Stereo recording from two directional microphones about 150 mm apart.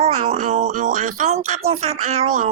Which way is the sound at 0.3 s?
55° right (ahead or behind).